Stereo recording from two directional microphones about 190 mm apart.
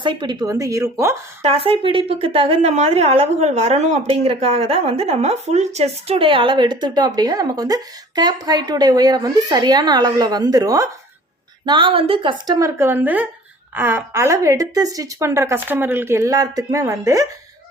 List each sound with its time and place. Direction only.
0.0 s a woman's voice: 25° right (ahead or behind)
1.4 s a woman's voice: 30° right (ahead or behind)